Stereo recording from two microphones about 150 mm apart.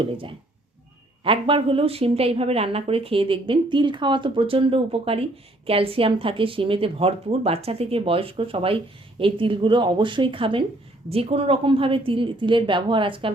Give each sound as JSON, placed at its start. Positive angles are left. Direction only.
{"t": 0.0, "sound": "a woman's voice", "side_deg": -35}